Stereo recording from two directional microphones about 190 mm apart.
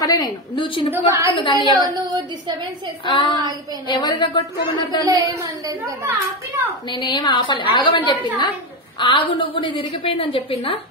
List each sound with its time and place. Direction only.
0.0 s a woman's voice: 20° left (ahead or behind)
0.9 s a woman's voice: 15° right (ahead or behind)
1.4 s a woman's voice: 25° left (ahead or behind)
1.7 s a woman's voice: 20° right (ahead or behind)
3.1 s a woman's voice: 25° left (ahead or behind)
5.0 s a woman's voice: 20° right (ahead or behind)
6.9 s a woman's voice: 25° left (ahead or behind)